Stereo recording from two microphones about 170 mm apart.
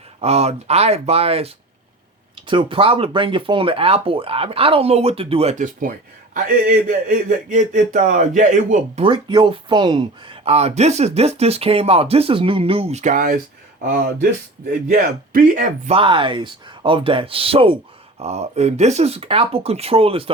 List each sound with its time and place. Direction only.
0.2 s speech: 40° right (ahead or behind)
9.0 s speech: 30° right (ahead or behind); by 15.6 s 50° right (ahead or behind)
15.9 s speech: 30° right (ahead or behind)